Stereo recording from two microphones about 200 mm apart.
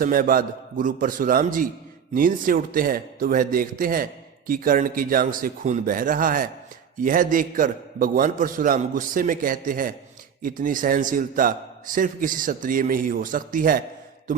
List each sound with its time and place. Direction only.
0.0 s speech: 45° right (ahead or behind)